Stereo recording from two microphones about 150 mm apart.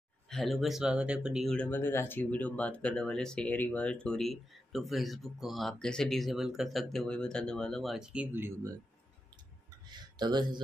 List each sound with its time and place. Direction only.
0.3 s speech: centre (ahead or behind)
9.8 s speech: 30° right (ahead or behind)